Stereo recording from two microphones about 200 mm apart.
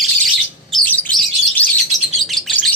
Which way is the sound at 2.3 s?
Centre (ahead or behind).